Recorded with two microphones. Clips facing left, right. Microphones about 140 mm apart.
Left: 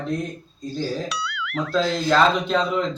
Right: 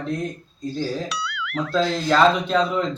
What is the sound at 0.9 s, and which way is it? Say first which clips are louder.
Speech: even; centre (ahead or behind).